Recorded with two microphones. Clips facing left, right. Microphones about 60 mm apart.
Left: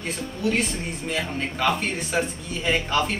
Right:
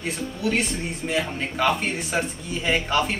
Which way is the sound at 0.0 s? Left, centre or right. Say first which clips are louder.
Even; centre.